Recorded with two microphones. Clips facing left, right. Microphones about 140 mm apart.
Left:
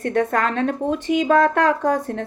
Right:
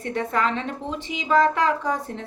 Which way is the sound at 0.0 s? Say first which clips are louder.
Left 4 dB; 55° left (ahead or behind).